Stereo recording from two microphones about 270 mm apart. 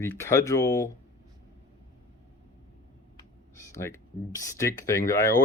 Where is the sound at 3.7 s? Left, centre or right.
Centre.